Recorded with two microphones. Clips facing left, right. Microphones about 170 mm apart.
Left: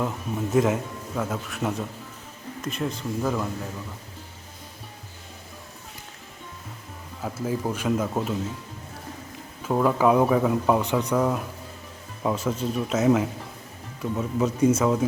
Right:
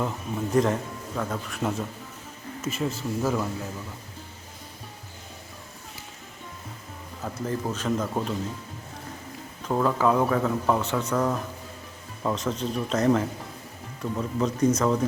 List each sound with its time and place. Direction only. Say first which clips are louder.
0.5 s a man's voice: left 1 dB; 5° left (ahead or behind)
7.2 s speech: left 2 dB; 5° left (ahead or behind)
9.6 s speech: left 2 dB; 5° left (ahead or behind)